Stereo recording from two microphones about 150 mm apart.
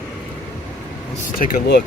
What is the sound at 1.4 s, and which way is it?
Speech, 80° left.